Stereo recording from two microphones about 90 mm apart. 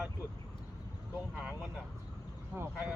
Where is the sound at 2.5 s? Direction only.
25° right (ahead or behind).